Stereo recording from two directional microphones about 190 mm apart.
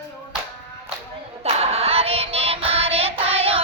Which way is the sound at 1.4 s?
30° right (ahead or behind).